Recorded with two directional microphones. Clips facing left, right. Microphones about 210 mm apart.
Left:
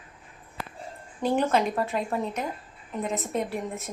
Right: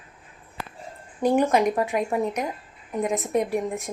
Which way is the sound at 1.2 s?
10° right (ahead or behind).